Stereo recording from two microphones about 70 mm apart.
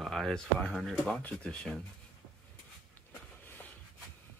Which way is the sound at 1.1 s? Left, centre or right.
Centre.